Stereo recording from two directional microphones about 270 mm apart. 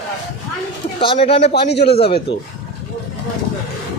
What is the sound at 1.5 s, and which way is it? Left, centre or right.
Speech, left.